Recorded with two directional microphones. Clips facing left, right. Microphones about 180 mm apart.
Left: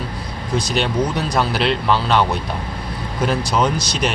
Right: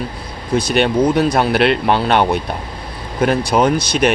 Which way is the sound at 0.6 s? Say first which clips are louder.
Right 6 dB; 60° right (ahead or behind).